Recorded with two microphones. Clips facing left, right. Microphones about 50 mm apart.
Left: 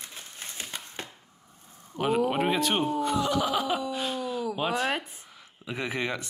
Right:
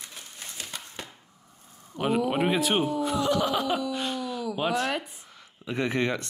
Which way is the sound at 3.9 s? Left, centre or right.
Centre.